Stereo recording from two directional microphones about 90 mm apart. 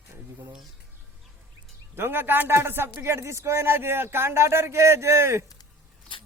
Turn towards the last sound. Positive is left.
turn(degrees=-30)  # may be behind; listen again after turning